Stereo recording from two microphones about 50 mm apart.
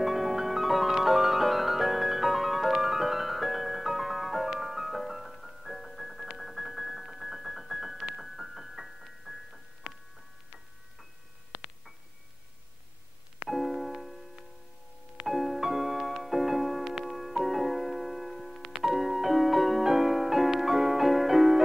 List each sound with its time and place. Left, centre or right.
0.0 s music: centre
6.3 s keyboard: centre
13.5 s music: centre
15.2 s music: centre